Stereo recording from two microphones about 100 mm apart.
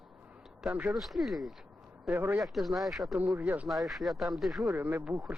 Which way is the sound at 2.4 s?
Centre (ahead or behind).